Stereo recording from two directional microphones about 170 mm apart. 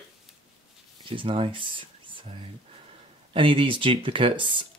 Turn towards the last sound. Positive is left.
turn(degrees=-30)  # may be behind; listen again after turning